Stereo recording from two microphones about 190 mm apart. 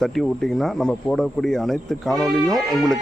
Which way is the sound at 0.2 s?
Centre (ahead or behind).